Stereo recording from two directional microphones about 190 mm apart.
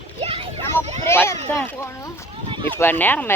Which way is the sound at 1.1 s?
15° left (ahead or behind).